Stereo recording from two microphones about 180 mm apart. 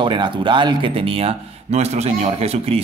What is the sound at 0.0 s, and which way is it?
Speech, 25° right (ahead or behind).